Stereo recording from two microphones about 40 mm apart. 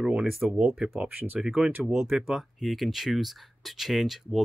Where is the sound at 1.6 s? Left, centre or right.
Right.